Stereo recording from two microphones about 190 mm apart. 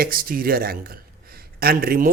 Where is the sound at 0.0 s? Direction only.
50° right (ahead or behind).